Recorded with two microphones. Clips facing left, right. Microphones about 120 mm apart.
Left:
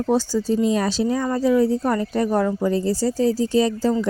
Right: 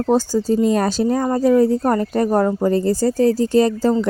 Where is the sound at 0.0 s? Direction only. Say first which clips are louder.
Right 3 dB; 50° right (ahead or behind).